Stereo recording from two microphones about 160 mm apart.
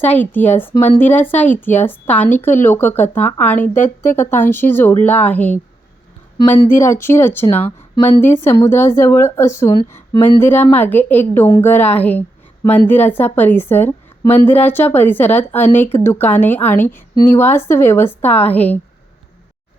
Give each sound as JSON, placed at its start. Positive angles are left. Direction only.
{"t": 0.0, "sound": "a woman's voice", "side_deg": 10}
{"t": 6.7, "sound": "a woman's voice", "side_deg": 15}